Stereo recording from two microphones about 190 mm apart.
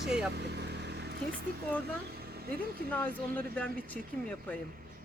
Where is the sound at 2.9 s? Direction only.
5° left (ahead or behind).